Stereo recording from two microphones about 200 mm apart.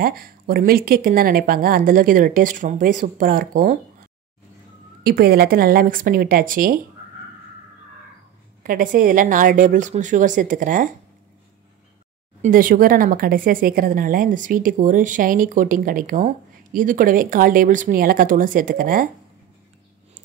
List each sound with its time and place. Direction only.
0.0 s speech: 50° right (ahead or behind)
5.0 s speech: 50° right (ahead or behind)
8.6 s a woman's voice: 45° right (ahead or behind)
12.4 s speech: 45° right (ahead or behind)